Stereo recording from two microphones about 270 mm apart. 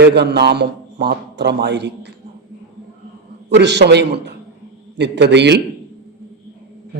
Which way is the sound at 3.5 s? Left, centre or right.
Right.